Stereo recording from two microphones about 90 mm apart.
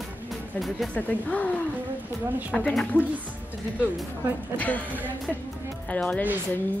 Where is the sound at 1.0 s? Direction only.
15° left (ahead or behind).